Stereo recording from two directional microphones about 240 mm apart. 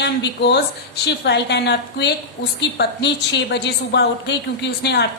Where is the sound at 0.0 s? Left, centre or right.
Left.